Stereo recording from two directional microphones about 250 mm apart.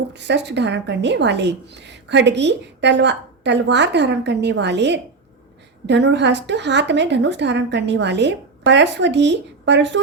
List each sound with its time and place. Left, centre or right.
0.1 s a woman's voice: right